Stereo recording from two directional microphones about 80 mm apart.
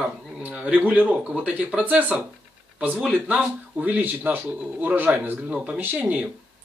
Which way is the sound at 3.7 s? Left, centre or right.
Right.